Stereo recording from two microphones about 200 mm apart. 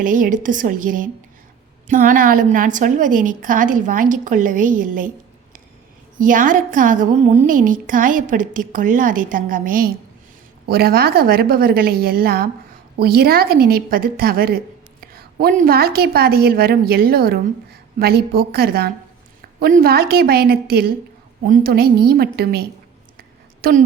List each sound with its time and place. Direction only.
0.0 s a woman's voice: 40° right (ahead or behind)
6.1 s a woman's voice: 40° right (ahead or behind)